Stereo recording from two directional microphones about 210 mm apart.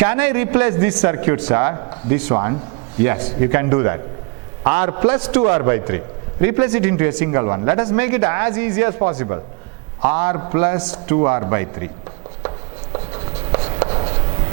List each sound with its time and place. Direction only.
0.0 s speech: 10° right (ahead or behind)
10.0 s speech: 10° right (ahead or behind)
11.2 s speech: 20° right (ahead or behind)
12.4 s writing: 25° right (ahead or behind)